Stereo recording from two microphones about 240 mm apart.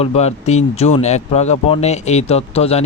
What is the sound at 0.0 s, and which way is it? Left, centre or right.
Speech, left.